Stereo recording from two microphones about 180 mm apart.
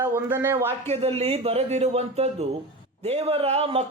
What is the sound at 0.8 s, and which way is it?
Speech, 35° right (ahead or behind).